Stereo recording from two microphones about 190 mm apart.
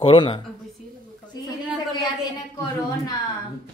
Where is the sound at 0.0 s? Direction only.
30° left (ahead or behind).